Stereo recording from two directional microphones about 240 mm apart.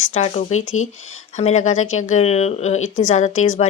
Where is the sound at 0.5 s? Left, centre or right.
Left.